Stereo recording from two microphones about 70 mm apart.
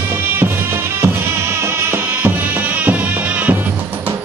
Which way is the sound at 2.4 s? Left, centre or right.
Right.